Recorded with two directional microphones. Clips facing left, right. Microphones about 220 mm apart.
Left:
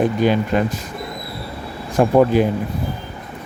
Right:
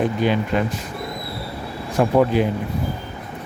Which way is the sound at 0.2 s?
45° left (ahead or behind).